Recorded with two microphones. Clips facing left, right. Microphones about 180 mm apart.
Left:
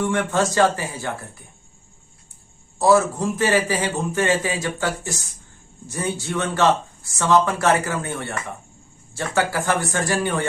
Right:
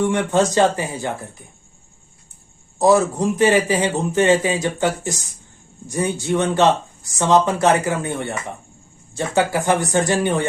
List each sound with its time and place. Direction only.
0.0 s a man's voice: 20° right (ahead or behind)
2.7 s a man's voice: 15° right (ahead or behind)